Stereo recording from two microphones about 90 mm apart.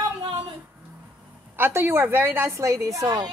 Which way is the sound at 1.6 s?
25° right (ahead or behind).